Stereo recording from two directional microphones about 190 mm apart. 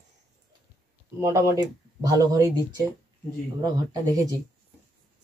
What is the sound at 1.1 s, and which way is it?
Speech, 15° right (ahead or behind).